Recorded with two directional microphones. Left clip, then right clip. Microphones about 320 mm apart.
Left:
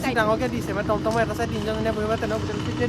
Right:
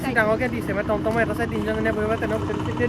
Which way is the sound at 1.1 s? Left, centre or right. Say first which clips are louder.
Right 1 dB; centre.